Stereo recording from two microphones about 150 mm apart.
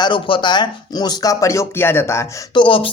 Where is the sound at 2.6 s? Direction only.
35° left (ahead or behind).